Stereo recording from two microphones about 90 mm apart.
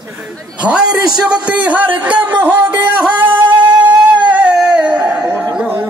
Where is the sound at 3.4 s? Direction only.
60° right (ahead or behind).